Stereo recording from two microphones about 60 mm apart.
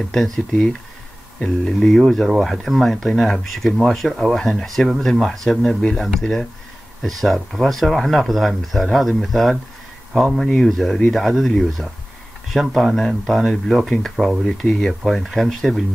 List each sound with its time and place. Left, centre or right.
0.1 s speech: centre
1.8 s speech: centre
14.1 s speech: centre
14.4 s speech: centre